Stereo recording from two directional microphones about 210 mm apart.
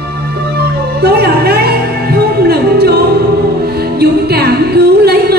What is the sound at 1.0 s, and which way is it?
Music, 50° right (ahead or behind).